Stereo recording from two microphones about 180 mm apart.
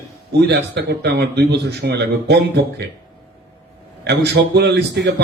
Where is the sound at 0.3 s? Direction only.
65° right (ahead or behind).